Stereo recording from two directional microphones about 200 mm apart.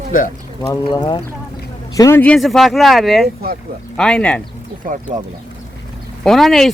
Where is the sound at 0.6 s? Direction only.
25° left (ahead or behind); by 4.4 s 5° left (ahead or behind).